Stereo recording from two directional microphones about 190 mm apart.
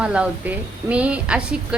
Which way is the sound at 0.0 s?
5° right (ahead or behind).